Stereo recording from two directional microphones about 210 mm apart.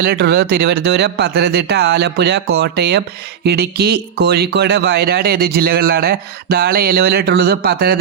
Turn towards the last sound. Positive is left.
turn(degrees=-50)  # may be behind; listen again after turning